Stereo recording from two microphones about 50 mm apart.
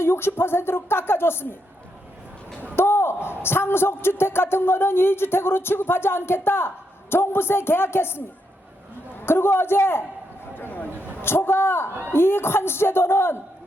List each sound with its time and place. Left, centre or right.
0.0 s a man's voice: left
2.7 s a sound: left
3.4 s a man's voice: left
9.2 s a man's voice: left
10.5 s a sound: left
12.1 s a man's voice: left